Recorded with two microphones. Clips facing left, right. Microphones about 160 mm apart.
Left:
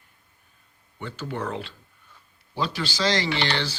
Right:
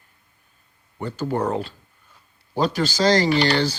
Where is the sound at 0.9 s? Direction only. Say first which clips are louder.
Right 7 dB; 40° right (ahead or behind).